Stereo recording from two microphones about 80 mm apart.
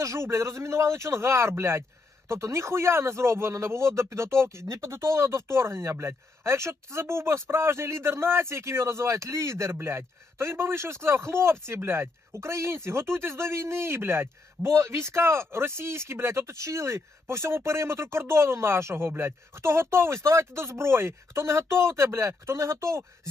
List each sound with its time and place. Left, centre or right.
0.0 s speech: right